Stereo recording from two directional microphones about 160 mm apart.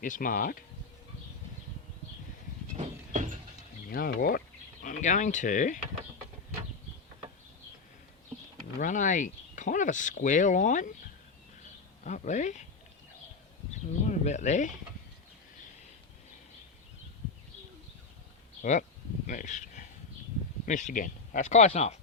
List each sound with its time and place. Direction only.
0.0 s speech: 60° left (ahead or behind)
2.7 s a sound: 50° right (ahead or behind)
3.8 s speech: 65° left (ahead or behind)
8.8 s speech: 55° left (ahead or behind)
12.0 s speech: 50° left (ahead or behind)
14.1 s speech: 45° left (ahead or behind)
18.6 s speech: 50° left (ahead or behind)